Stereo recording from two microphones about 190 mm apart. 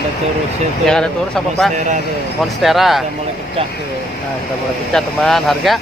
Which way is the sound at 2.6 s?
Centre (ahead or behind).